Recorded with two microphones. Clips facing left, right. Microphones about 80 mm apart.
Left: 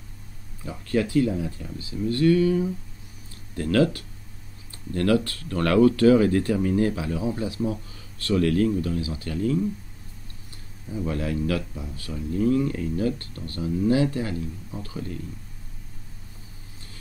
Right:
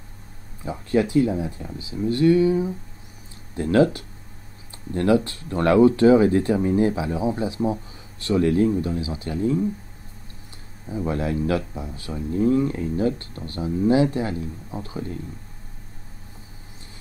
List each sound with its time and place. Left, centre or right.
0.7 s speech: right
10.9 s speech: right